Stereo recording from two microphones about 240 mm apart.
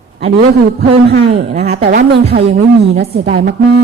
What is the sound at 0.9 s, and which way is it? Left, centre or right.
Speech, right.